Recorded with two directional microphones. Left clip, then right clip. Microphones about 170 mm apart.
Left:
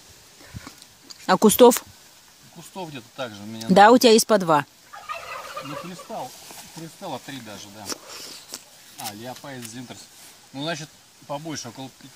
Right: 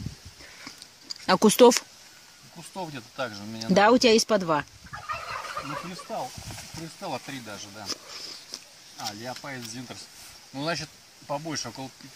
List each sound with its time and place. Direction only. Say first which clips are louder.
1.2 s speech: left 3 dB; 10° left (ahead or behind)
3.7 s speech: left 6 dB; 20° left (ahead or behind)
5.6 s turkey: even; 55° left (ahead or behind)
6.8 s speech: left 1 dB; centre (ahead or behind)
7.8 s a sound: left 2 dB; 25° left (ahead or behind)
9.2 s speech: even; centre (ahead or behind)